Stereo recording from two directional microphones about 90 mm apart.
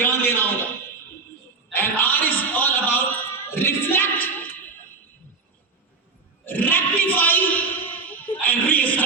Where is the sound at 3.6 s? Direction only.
25° left (ahead or behind).